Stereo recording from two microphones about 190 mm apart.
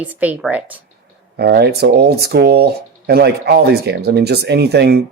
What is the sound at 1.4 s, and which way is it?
Speech, 55° right (ahead or behind).